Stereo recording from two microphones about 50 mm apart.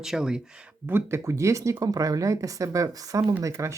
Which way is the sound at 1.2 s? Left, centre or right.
Right.